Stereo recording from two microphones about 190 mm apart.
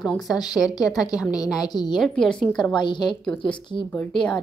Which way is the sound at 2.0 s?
5° left (ahead or behind).